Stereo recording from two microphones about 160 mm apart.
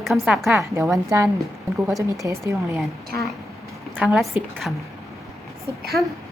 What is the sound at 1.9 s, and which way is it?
Speech, 20° right (ahead or behind).